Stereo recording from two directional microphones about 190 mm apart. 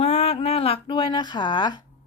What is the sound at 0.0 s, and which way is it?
Speech, 35° left (ahead or behind).